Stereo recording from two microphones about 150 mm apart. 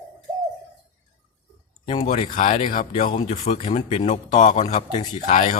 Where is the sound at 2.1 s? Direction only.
55° left (ahead or behind).